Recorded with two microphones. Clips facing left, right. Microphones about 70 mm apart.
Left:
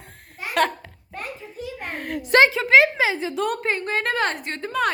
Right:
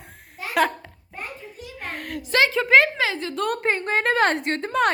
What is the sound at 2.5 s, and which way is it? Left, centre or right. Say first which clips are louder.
Speech: left 1 dB; centre.